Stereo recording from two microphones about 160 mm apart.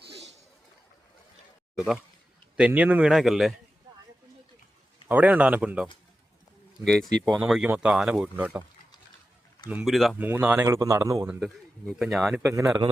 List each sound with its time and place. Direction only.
2.6 s speech: 10° right (ahead or behind)
5.0 s speech: 10° right (ahead or behind)
6.8 s speech: 5° left (ahead or behind)
9.6 s speech: 5° right (ahead or behind)
10.2 s speech: 10° right (ahead or behind)
11.3 s speech: centre (ahead or behind)
12.4 s speech: 20° right (ahead or behind)